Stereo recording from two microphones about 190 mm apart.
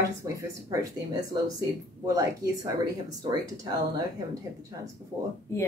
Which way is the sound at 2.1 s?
20° right (ahead or behind).